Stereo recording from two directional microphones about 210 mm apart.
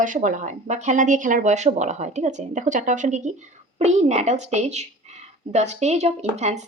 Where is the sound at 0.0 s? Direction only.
40° right (ahead or behind).